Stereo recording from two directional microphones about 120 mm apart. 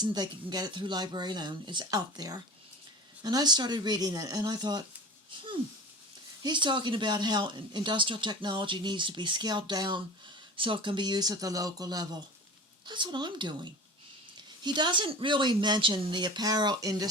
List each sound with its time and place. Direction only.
0.0 s speech: 35° right (ahead or behind)
6.4 s speech: 40° right (ahead or behind)